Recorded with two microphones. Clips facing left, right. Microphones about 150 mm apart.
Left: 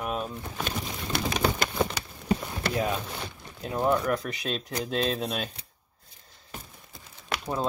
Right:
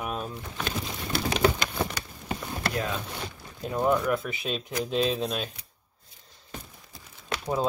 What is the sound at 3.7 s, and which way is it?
Speech, centre (ahead or behind).